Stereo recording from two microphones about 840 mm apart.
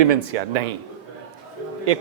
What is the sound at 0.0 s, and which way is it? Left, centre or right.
Speech, right.